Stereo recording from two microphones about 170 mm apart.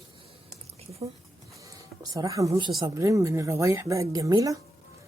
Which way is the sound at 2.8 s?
20° right (ahead or behind).